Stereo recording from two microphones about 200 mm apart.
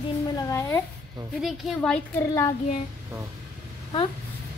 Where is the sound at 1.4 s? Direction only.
5° left (ahead or behind).